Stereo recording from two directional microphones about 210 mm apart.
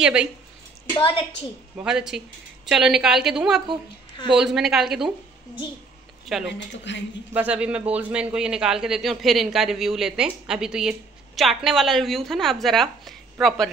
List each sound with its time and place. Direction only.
0.0 s a man's voice: 5° right (ahead or behind)
0.9 s a woman's voice: 25° left (ahead or behind)
1.8 s a man's voice: 5° right (ahead or behind)
6.2 s speech: centre (ahead or behind)
6.8 s a woman's voice: 55° left (ahead or behind)
7.3 s a man's voice: 5° right (ahead or behind)